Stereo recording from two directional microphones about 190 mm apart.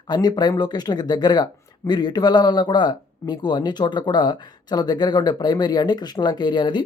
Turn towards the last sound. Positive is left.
turn(degrees=25)  # may be behind; listen again after turning